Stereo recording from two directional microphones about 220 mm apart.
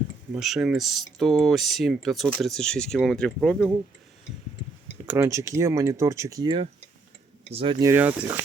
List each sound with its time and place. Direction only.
0.3 s speech: centre (ahead or behind)
5.0 s speech: 10° right (ahead or behind)